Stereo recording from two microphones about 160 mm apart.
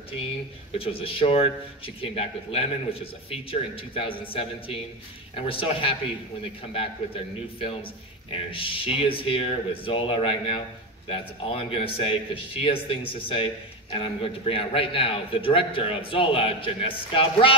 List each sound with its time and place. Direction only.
0.7 s a man's voice: 35° left (ahead or behind)